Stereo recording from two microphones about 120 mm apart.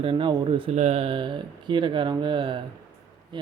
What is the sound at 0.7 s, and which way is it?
Speech, 65° right (ahead or behind).